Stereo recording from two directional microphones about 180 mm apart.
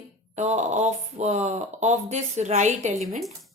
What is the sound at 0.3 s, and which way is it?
Speech, 40° right (ahead or behind).